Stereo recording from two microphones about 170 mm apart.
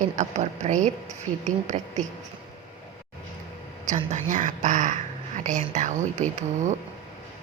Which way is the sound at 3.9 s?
45° right (ahead or behind).